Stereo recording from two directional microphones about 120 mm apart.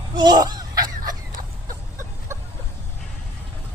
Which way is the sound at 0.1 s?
40° right (ahead or behind).